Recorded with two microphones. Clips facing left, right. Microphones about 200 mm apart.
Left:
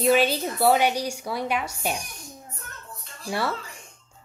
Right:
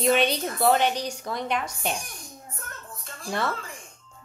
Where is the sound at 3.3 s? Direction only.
5° left (ahead or behind).